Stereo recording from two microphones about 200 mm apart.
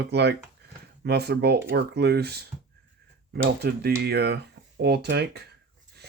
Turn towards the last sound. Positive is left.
turn(degrees=-55)  # may be behind; listen again after turning